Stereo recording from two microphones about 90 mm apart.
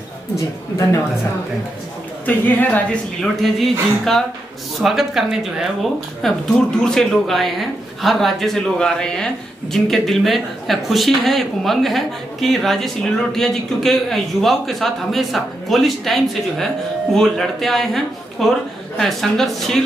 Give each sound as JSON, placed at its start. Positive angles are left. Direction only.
{"t": 2.2, "sound": "a woman's voice", "side_deg": 20}
{"t": 3.2, "sound": "speech", "side_deg": 5}